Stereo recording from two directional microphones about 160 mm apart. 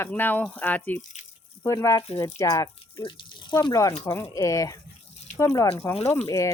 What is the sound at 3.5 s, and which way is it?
Speech, 25° left (ahead or behind).